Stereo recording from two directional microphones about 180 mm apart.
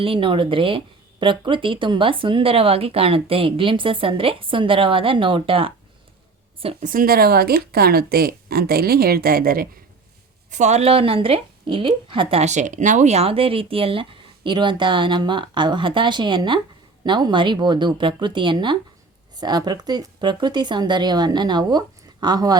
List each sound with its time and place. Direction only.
0.0 s a woman's voice: 30° right (ahead or behind)
6.8 s speech: 50° right (ahead or behind)
10.5 s a woman's voice: 40° right (ahead or behind); by 22.5 s 20° right (ahead or behind)